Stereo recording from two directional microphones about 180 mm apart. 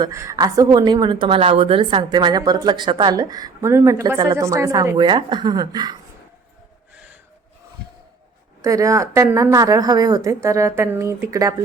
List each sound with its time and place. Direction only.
0.0 s a woman's voice: 15° right (ahead or behind)
6.9 s a sound: 5° right (ahead or behind)
8.6 s a woman's voice: 15° right (ahead or behind)